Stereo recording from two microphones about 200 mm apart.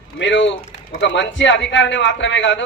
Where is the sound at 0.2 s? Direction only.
65° left (ahead or behind).